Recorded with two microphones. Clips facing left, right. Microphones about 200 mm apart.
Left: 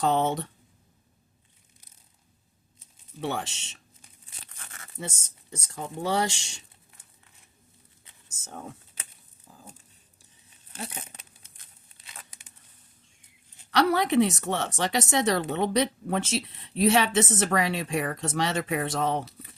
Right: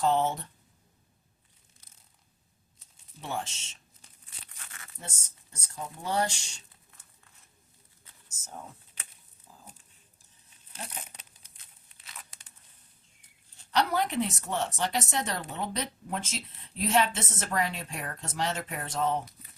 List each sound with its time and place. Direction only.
0.0 s speech: 70° left (ahead or behind)
3.2 s speech: 75° left (ahead or behind)
4.9 s speech: 80° left
13.7 s speech: 75° left (ahead or behind)